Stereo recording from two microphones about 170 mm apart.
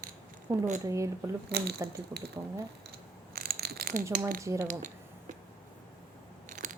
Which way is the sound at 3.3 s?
60° right (ahead or behind).